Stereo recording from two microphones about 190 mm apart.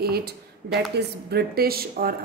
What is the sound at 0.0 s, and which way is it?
A woman's voice, 55° right (ahead or behind).